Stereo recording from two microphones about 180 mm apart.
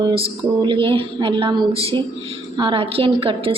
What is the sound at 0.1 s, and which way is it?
A woman's voice, 30° right (ahead or behind).